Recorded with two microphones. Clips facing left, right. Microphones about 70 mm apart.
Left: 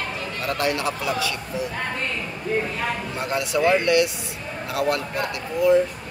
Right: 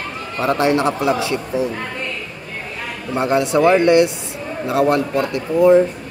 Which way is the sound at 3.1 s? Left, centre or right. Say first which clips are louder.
Right 12 dB; right.